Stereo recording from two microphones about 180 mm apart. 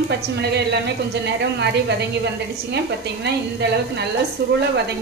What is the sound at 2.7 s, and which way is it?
A woman's voice, 70° right (ahead or behind).